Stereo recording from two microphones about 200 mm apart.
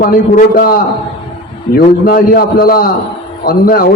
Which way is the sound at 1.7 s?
45° left (ahead or behind).